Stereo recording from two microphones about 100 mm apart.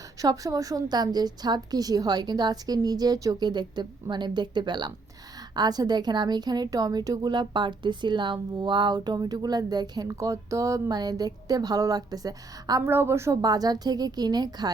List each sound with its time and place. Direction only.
0.2 s a woman's voice: 35° right (ahead or behind)
12.8 s a woman's voice: 25° right (ahead or behind)
13.4 s a woman's voice: 40° right (ahead or behind)